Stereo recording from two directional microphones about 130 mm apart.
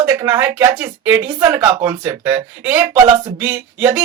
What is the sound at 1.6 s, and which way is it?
Speech, 30° right (ahead or behind).